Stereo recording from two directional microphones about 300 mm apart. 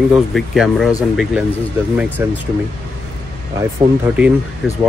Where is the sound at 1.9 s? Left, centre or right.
Centre.